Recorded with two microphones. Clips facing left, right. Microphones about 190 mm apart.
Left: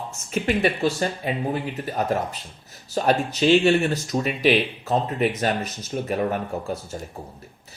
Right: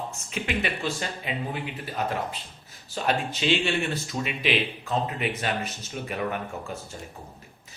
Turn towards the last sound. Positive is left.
turn(degrees=40)  # may be behind; listen again after turning